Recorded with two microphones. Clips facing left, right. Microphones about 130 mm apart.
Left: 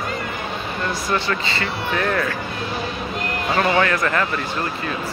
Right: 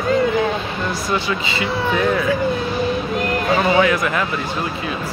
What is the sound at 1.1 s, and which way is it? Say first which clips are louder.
Speech: right 1 dB; 10° right (ahead or behind).